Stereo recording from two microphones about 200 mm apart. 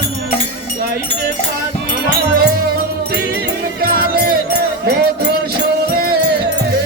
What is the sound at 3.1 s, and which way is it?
Music, 50° right (ahead or behind).